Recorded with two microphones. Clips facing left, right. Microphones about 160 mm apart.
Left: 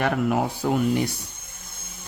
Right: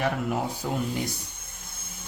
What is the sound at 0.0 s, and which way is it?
Speech, 65° left (ahead or behind).